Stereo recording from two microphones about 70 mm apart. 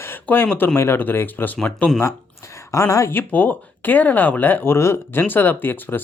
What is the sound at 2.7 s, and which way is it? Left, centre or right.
Speech, left.